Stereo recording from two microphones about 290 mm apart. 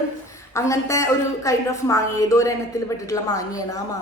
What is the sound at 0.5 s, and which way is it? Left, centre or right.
A woman's voice, centre.